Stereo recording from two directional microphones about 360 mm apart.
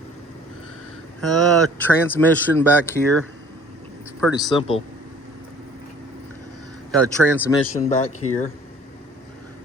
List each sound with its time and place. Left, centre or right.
1.4 s speech: centre
6.9 s speech: centre
7.8 s speech: centre